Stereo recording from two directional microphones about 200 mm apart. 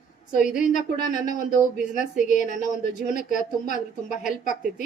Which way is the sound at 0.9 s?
40° left (ahead or behind).